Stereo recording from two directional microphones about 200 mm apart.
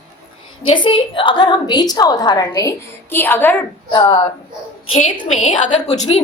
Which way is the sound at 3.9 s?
25° left (ahead or behind).